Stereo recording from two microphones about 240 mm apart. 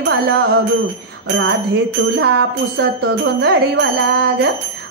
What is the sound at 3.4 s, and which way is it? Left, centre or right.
Jingle bell, right.